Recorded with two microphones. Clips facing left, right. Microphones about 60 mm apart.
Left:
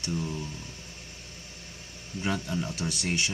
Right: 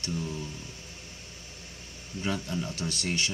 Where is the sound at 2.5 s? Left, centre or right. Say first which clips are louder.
Left 1 dB; centre.